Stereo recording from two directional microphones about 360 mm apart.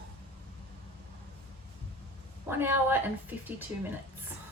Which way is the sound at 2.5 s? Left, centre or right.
Centre.